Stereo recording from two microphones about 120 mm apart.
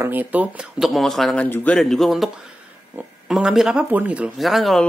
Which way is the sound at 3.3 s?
5° right (ahead or behind).